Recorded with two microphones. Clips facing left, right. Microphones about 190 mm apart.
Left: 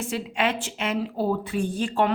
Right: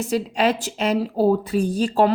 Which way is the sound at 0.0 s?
40° right (ahead or behind).